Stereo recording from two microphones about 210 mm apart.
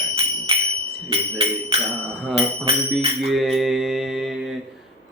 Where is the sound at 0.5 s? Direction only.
25° right (ahead or behind).